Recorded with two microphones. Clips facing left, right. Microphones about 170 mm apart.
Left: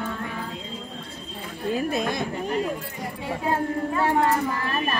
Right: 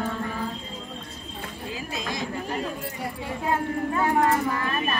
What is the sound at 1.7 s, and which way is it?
Speech, 55° left (ahead or behind).